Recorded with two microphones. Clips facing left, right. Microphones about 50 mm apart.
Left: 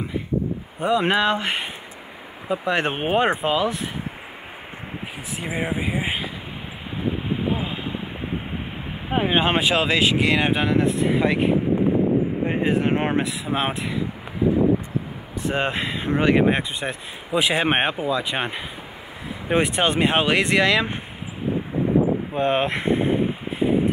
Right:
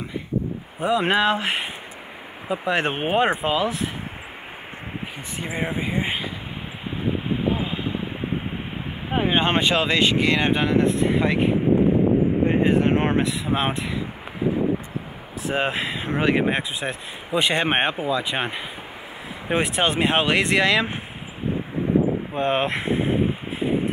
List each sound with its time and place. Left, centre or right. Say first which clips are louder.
0.7 s speech: even; centre
5.4 s speech: left 1 dB; centre
7.2 s a sound: right 1 dB; centre
9.1 s speech: left 1 dB; centre
15.5 s speech: right 1 dB; centre
22.3 s a sound: left 1 dB; centre